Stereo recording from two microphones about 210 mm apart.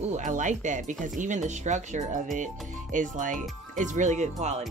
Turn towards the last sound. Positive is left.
turn(degrees=-30)  # may be behind; listen again after turning